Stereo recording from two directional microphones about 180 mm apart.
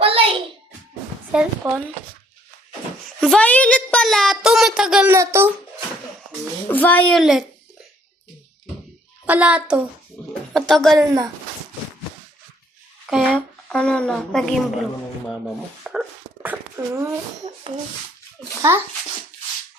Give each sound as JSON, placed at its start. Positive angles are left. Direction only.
{"t": 0.0, "sound": "a sound", "side_deg": -30}
{"t": 1.3, "sound": "a child's voice", "side_deg": -10}
{"t": 3.2, "sound": "a child's voice", "side_deg": 5}
{"t": 5.1, "sound": "a child's voice", "side_deg": -15}
{"t": 6.7, "sound": "a child's voice", "side_deg": 10}
{"t": 9.2, "sound": "a child's voice", "side_deg": -10}
{"t": 11.0, "sound": "speech", "side_deg": -20}
{"t": 13.1, "sound": "speech", "side_deg": -5}
{"t": 13.7, "sound": "a child's voice", "side_deg": 5}
{"t": 15.8, "sound": "dog", "side_deg": -5}